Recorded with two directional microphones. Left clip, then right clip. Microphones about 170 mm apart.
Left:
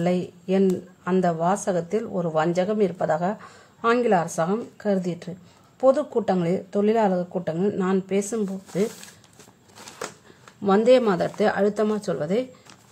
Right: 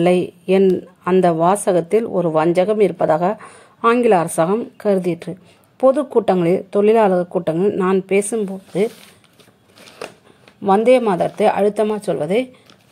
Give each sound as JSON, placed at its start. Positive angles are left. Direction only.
{"t": 0.0, "sound": "speech", "side_deg": -25}
{"t": 1.5, "sound": "speech", "side_deg": -30}
{"t": 2.1, "sound": "a woman's voice", "side_deg": -15}
{"t": 10.6, "sound": "speech", "side_deg": 0}